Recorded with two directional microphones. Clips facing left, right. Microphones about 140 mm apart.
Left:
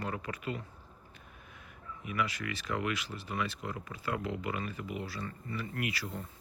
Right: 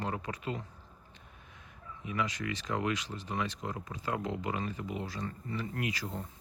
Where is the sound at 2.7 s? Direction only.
20° right (ahead or behind).